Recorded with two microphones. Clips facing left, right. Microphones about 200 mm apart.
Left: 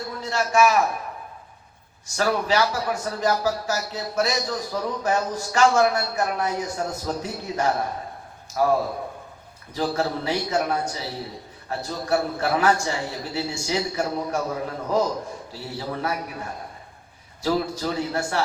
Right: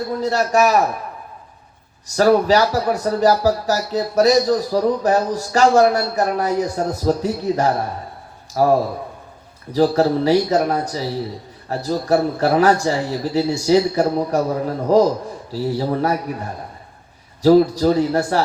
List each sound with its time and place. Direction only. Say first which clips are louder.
0.1 s a man's voice: right 6 dB; 40° right (ahead or behind)
2.1 s speech: right 8 dB; 40° right (ahead or behind)